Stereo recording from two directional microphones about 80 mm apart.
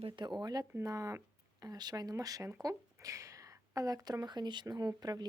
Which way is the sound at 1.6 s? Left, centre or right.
Right.